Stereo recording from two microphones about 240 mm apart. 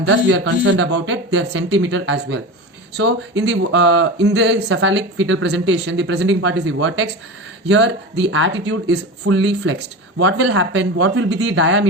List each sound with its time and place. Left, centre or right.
0.0 s speech: right